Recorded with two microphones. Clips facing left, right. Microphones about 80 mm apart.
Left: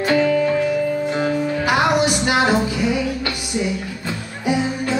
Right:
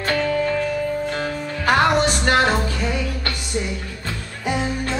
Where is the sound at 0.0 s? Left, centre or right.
Centre.